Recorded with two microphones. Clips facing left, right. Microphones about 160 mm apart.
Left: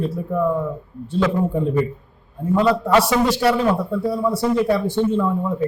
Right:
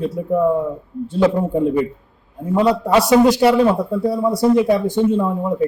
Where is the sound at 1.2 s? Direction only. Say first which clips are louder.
Right 4 dB; 20° right (ahead or behind).